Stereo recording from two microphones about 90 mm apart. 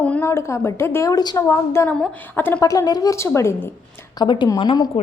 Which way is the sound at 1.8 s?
30° left (ahead or behind).